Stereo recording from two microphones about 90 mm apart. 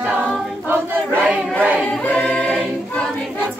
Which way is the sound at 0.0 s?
20° right (ahead or behind).